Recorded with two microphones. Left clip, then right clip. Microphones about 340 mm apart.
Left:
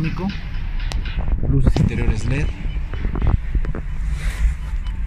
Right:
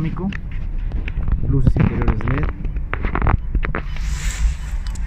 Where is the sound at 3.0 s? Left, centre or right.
Right.